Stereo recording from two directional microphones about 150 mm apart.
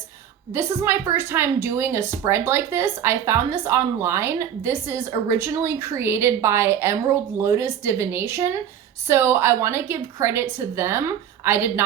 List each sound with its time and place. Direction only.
0.5 s speech: 20° right (ahead or behind)